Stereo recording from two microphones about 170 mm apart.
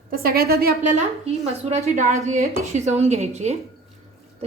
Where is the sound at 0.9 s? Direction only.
40° right (ahead or behind).